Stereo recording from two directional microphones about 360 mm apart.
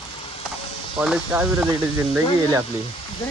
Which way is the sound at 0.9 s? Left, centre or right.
Centre.